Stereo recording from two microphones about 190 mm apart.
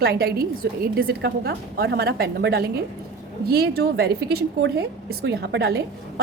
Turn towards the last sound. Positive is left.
turn(degrees=-60)  # may be behind; listen again after turning